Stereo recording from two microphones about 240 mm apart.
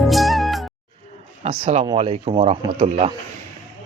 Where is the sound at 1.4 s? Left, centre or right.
Right.